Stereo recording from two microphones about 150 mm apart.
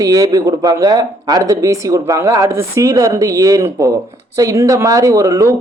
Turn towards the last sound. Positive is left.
turn(degrees=-20)  # may be behind; listen again after turning